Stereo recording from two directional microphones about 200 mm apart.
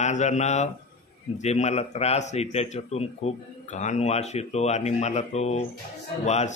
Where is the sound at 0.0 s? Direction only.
35° left (ahead or behind).